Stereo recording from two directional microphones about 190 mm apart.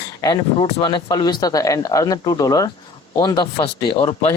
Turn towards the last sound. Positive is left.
turn(degrees=25)  # may be behind; listen again after turning